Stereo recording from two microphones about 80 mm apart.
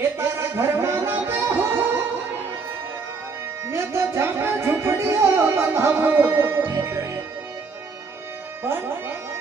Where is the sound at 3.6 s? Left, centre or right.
Right.